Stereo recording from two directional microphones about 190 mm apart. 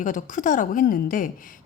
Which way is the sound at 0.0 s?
45° left (ahead or behind).